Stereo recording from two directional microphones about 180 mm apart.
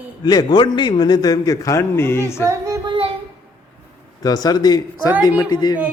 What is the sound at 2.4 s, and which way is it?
Child singing, 15° right (ahead or behind).